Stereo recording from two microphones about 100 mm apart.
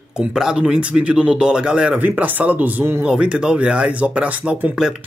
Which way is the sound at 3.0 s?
10° right (ahead or behind).